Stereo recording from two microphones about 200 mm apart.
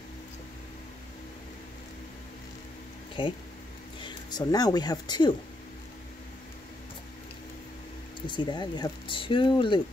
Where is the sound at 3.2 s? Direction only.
25° left (ahead or behind).